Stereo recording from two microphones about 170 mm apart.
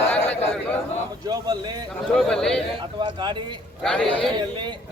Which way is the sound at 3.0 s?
30° right (ahead or behind).